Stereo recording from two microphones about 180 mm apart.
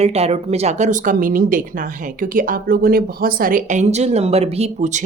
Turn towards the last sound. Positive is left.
turn(degrees=-35)  # may be behind; listen again after turning